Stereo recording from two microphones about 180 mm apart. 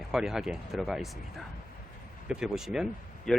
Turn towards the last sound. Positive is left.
turn(degrees=0)  # may be behind; listen again after turning